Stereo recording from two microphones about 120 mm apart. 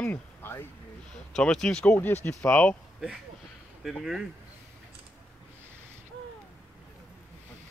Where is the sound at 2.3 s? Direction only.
10° left (ahead or behind).